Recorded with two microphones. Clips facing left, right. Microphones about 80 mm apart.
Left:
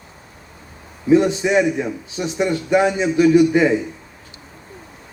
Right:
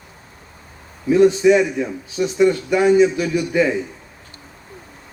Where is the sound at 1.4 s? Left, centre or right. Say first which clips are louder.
Right 3 dB; left.